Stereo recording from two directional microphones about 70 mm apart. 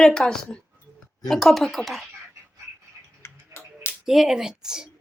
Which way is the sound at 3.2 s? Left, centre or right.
Left.